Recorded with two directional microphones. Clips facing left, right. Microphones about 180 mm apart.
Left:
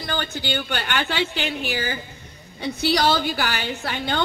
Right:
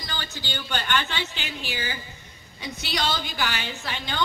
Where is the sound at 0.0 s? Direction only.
55° left (ahead or behind).